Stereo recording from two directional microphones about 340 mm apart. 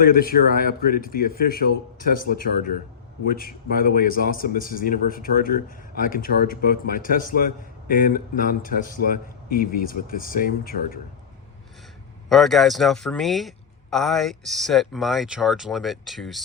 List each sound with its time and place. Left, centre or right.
0.0 s a man's voice: left
12.3 s speech: centre